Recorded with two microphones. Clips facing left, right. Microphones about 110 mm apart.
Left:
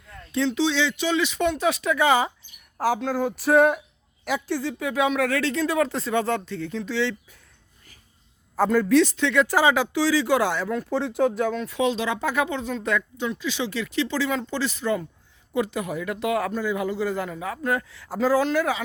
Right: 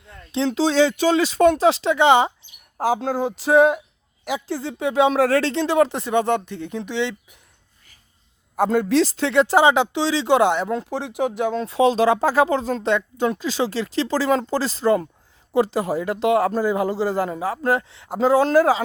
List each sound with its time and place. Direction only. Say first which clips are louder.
0.5 s speech: right 6 dB; 40° right (ahead or behind); by 7.3 s 20° right (ahead or behind)
8.5 s speech: right 1 dB; 25° right (ahead or behind)
11.5 s speech: right 6 dB; 30° right (ahead or behind)
13.1 s speech: right 6 dB; 45° right (ahead or behind)